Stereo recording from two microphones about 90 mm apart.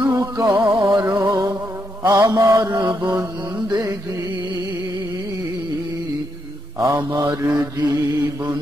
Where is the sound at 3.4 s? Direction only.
45° right (ahead or behind).